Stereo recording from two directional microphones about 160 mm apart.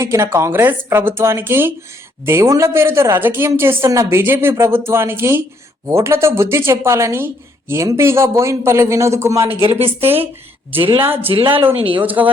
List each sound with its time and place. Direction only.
0.0 s a woman's voice: 15° right (ahead or behind)
9.6 s speech: 35° right (ahead or behind)
11.0 s a woman's voice: 15° right (ahead or behind)
11.3 s speech: 35° right (ahead or behind)
12.0 s a woman's voice: 10° right (ahead or behind)